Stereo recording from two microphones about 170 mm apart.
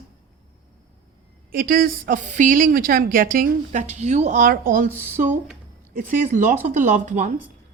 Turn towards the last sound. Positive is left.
turn(degrees=-45)  # may be behind; listen again after turning